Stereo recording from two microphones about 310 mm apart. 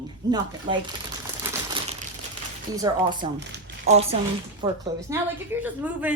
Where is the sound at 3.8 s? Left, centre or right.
Centre.